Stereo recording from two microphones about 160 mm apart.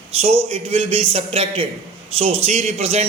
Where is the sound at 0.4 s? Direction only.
40° right (ahead or behind).